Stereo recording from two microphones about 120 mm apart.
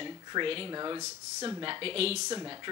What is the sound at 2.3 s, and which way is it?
Speech, 35° right (ahead or behind).